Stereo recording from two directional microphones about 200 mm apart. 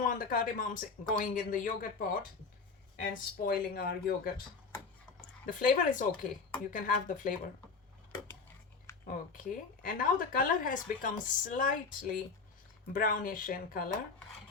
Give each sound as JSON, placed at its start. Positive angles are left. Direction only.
{"t": 0.0, "sound": "a man's voice", "side_deg": 45}
{"t": 9.0, "sound": "speech", "side_deg": 40}